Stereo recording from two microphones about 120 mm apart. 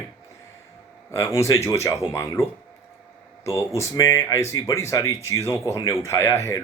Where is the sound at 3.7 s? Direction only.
25° left (ahead or behind).